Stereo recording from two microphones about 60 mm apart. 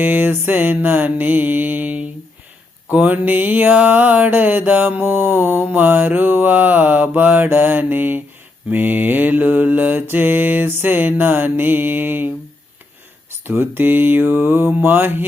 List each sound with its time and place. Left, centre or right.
0.0 s a sound: right
5.7 s mantra: right
13.4 s mantra: right